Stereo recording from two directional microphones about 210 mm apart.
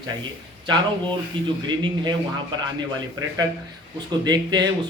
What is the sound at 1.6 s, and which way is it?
Speech, 20° right (ahead or behind).